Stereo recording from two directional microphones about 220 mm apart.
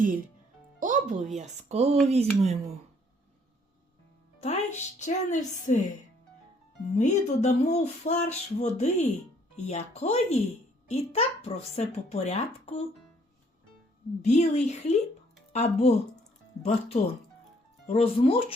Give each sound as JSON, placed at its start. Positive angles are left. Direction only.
{"t": 0.8, "sound": "music", "side_deg": -35}
{"t": 1.4, "sound": "speech", "side_deg": -30}
{"t": 4.4, "sound": "speech", "side_deg": 30}
{"t": 6.9, "sound": "speech", "side_deg": 30}
{"t": 14.2, "sound": "speech", "side_deg": 30}